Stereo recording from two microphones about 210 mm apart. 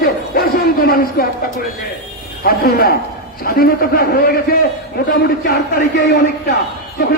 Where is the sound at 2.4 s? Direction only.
45° left (ahead or behind).